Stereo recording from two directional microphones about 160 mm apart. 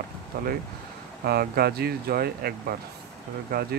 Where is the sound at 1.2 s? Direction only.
75° right (ahead or behind).